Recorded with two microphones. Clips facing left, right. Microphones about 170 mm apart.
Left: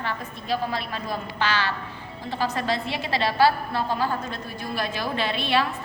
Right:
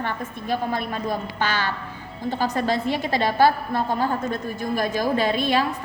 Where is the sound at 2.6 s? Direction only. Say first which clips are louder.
Right 4 dB; 45° right (ahead or behind).